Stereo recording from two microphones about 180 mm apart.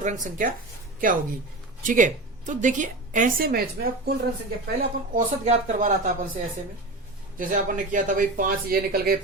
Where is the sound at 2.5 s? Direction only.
45° right (ahead or behind).